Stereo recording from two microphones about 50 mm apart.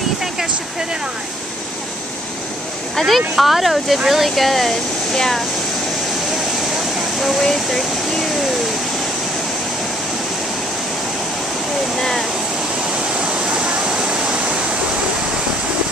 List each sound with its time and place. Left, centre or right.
3.2 s speech: centre
7.2 s speech: centre
12.0 s speech: centre
13.2 s waterfall: centre